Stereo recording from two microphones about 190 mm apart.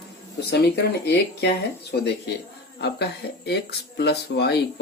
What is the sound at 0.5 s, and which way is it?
Speech, 60° left (ahead or behind).